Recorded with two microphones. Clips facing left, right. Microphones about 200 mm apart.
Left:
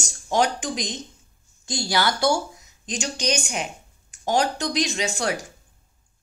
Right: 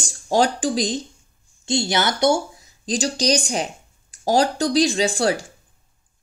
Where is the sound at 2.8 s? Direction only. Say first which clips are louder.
Right 6 dB; 35° right (ahead or behind).